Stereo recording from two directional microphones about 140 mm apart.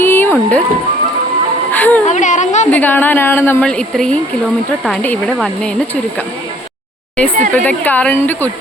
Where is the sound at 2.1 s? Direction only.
60° left (ahead or behind).